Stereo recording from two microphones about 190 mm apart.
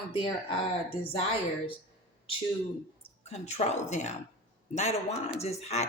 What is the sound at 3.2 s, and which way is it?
A man's voice, 35° left (ahead or behind).